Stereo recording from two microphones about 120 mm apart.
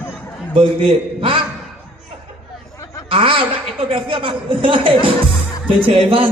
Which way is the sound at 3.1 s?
50° right (ahead or behind).